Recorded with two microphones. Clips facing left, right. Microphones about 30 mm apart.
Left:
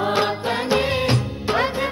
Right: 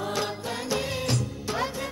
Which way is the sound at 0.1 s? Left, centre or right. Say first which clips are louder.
Left 9 dB; left.